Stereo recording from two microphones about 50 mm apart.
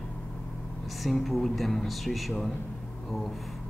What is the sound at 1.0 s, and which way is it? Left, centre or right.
A man's voice, centre.